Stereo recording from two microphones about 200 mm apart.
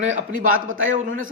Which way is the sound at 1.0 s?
40° right (ahead or behind).